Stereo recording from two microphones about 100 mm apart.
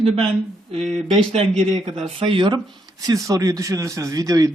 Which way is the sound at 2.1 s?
60° right (ahead or behind).